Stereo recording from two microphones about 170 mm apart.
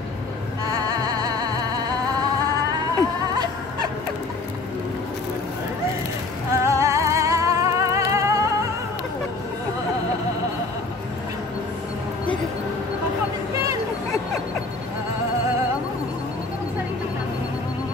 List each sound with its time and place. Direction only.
0.7 s music: 20° right (ahead or behind)
6.5 s music: 15° right (ahead or behind)